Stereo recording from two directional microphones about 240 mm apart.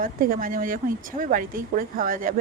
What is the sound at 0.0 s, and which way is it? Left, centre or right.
A woman's voice, right.